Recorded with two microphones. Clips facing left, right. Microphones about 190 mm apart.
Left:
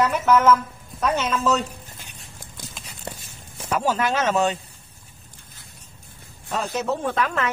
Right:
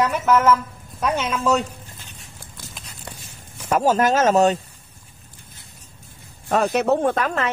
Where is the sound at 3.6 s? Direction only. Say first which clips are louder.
Right 5 dB; 45° right (ahead or behind).